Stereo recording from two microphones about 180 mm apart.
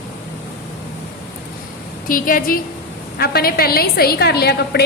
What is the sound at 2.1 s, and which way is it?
A woman's voice, 50° left (ahead or behind).